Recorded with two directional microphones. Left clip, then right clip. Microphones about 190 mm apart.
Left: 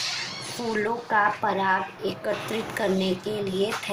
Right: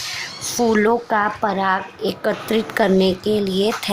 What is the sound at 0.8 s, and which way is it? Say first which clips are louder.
Speech: right 2 dB; 45° right (ahead or behind).